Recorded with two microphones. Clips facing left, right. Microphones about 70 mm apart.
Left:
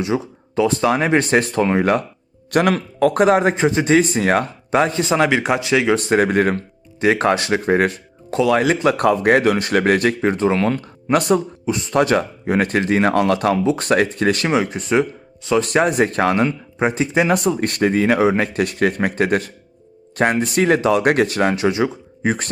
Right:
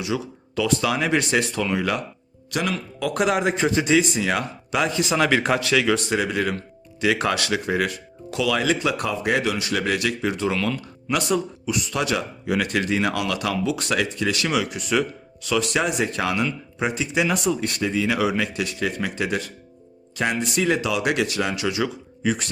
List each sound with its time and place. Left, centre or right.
0.0 s speech: left
2.5 s speech: left
5.3 s speech: centre
6.1 s speech: left